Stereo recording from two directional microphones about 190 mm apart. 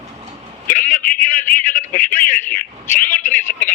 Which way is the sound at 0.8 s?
45° left (ahead or behind).